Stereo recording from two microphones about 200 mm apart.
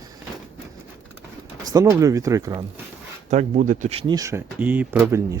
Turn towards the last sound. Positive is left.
turn(degrees=-15)  # may be behind; listen again after turning